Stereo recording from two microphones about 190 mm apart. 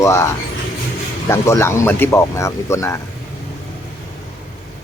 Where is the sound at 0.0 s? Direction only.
15° left (ahead or behind).